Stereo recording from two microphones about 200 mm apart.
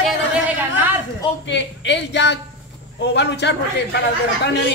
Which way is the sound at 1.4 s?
65° left (ahead or behind).